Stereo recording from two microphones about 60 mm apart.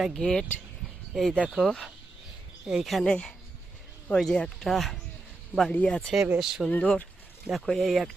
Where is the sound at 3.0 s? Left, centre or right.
Centre.